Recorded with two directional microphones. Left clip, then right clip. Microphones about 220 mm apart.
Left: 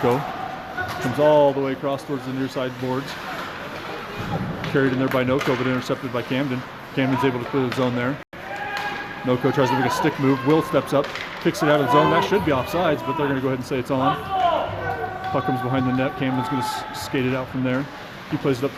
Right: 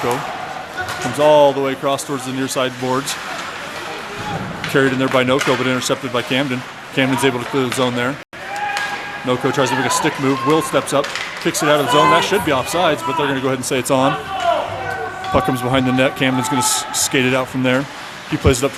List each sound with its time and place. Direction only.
1.2 s a man's voice: 10° right (ahead or behind); by 3.0 s 30° right (ahead or behind)
4.7 s a man's voice: 25° right (ahead or behind)
9.2 s speech: 5° right (ahead or behind); by 14.0 s 25° right (ahead or behind)
15.4 s a man's voice: 30° right (ahead or behind)